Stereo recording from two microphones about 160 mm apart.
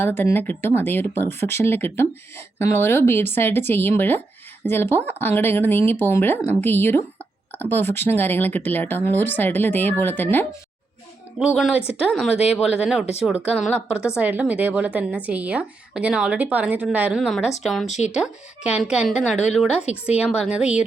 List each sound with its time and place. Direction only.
0.0 s speech: 15° left (ahead or behind)
11.3 s a woman's voice: centre (ahead or behind)
17.8 s speech: 45° left (ahead or behind)
18.1 s speech: 5° right (ahead or behind)
19.3 s speech: 45° left (ahead or behind)
19.9 s a woman's voice: 5° right (ahead or behind)